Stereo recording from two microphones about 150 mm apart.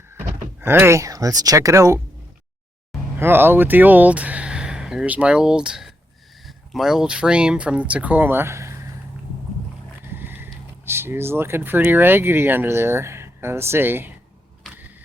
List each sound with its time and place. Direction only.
0.6 s speech: 15° right (ahead or behind)
3.2 s speech: 15° right (ahead or behind)
10.1 s speech: 15° right (ahead or behind)